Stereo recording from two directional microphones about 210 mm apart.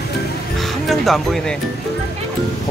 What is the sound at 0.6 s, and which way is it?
Speech, centre (ahead or behind).